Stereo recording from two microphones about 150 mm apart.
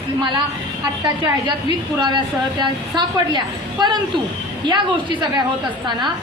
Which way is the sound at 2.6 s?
30° right (ahead or behind).